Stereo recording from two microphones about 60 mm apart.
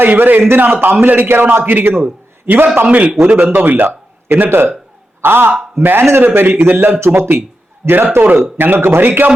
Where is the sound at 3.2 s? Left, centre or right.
Right.